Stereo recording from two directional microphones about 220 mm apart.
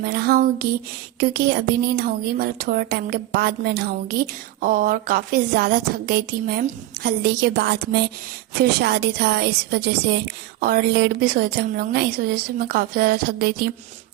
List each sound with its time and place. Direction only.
0.0 s speech: 45° right (ahead or behind)